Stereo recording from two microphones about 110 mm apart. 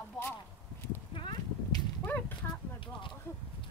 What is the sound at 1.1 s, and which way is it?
Horse, 50° left (ahead or behind).